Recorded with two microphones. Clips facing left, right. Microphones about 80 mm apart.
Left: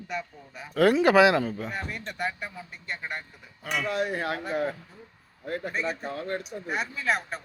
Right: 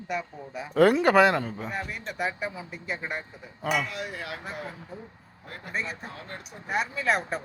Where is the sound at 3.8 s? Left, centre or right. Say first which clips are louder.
Left 7 dB; left.